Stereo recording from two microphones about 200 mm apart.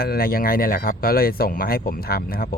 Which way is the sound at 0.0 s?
50° left (ahead or behind).